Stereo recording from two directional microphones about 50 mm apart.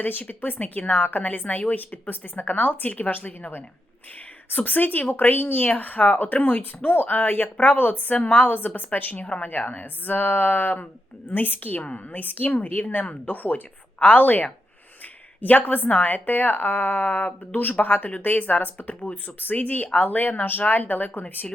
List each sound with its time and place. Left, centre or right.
0.0 s speech: left
9.2 s a woman's voice: left
11.8 s speech: left